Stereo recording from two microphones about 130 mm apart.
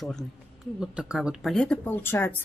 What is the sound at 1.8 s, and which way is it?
Speech, 15° left (ahead or behind).